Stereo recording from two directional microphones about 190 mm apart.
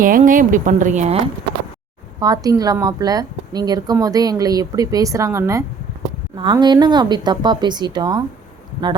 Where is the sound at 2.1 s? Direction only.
20° right (ahead or behind).